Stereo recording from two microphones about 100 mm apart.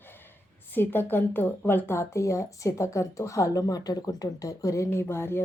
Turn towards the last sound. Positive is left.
turn(degrees=25)  # may be behind; listen again after turning